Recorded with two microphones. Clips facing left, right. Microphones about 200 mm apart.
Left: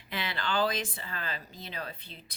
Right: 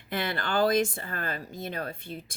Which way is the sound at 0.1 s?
50° right (ahead or behind).